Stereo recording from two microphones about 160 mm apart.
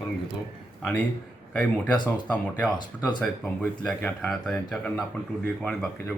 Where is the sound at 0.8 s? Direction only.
10° left (ahead or behind).